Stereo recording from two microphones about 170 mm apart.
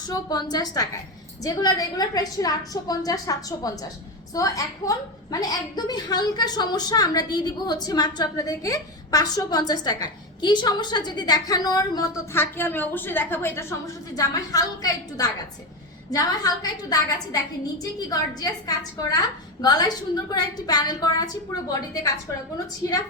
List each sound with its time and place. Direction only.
0.1 s a woman's voice: 25° left (ahead or behind)